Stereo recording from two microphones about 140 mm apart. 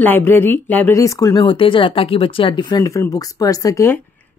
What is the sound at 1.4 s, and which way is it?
Speech, 40° left (ahead or behind).